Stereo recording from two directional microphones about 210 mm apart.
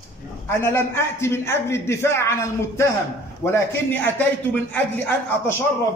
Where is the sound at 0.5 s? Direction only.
10° left (ahead or behind).